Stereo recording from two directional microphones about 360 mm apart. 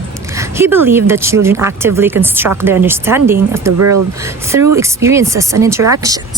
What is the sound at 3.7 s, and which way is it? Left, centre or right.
Speech, right.